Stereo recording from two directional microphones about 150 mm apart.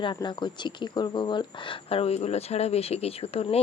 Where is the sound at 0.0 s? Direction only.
30° left (ahead or behind).